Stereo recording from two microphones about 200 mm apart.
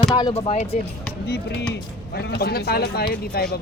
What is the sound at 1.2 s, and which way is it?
Speech, 55° left (ahead or behind).